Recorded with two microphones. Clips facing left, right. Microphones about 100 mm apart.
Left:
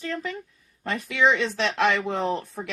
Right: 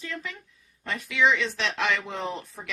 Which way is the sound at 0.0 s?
45° left (ahead or behind).